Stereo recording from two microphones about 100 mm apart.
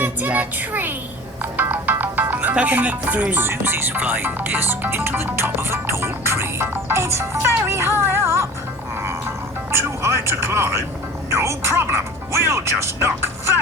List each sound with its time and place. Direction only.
0.0 s child singing: 15° right (ahead or behind)
1.4 s music: 20° right (ahead or behind)
9.7 s speech: 25° right (ahead or behind)